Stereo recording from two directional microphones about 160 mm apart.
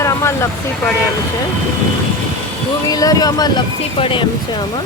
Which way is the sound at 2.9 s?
25° left (ahead or behind).